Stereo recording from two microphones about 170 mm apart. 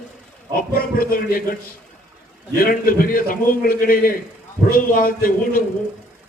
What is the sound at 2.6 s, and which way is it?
A man's voice, 60° left (ahead or behind).